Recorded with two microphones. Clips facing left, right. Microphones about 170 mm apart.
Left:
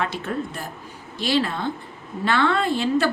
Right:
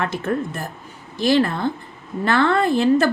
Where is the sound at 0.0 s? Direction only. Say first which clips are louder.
Right 4 dB; 50° right (ahead or behind).